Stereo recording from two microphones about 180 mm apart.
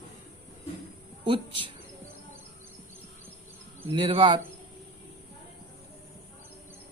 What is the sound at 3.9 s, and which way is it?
Speech, 30° right (ahead or behind).